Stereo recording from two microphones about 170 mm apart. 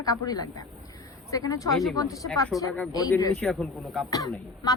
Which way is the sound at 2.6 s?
20° left (ahead or behind).